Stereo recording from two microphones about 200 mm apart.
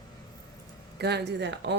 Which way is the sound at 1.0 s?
55° right (ahead or behind).